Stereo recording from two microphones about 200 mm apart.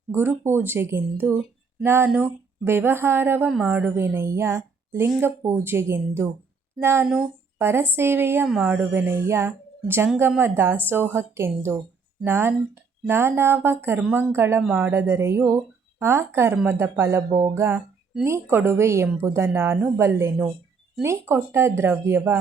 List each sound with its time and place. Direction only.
0.1 s a woman's voice: 10° right (ahead or behind)